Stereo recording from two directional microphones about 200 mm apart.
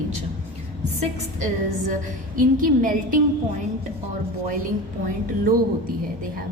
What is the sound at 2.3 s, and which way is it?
Speech, 40° right (ahead or behind).